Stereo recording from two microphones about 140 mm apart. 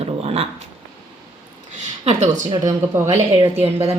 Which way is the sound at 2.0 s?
55° right (ahead or behind).